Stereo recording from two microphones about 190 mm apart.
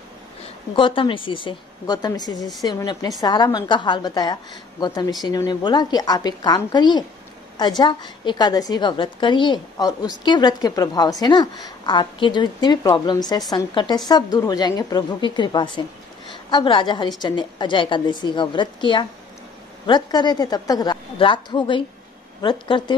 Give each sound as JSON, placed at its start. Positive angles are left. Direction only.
{"t": 0.7, "sound": "a woman's voice", "side_deg": 25}